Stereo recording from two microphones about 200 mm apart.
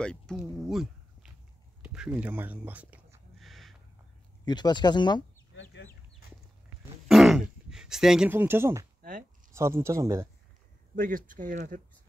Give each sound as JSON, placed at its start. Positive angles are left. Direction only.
{"t": 0.0, "sound": "speech", "side_deg": 5}
{"t": 1.8, "sound": "a sound", "side_deg": -5}
{"t": 4.5, "sound": "speech", "side_deg": 20}
{"t": 7.1, "sound": "speech", "side_deg": 0}
{"t": 11.0, "sound": "speech", "side_deg": -40}